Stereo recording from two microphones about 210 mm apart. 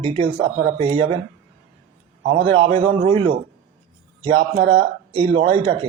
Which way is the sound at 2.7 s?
25° right (ahead or behind).